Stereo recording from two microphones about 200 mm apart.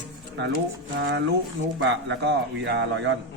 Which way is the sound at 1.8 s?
60° right (ahead or behind).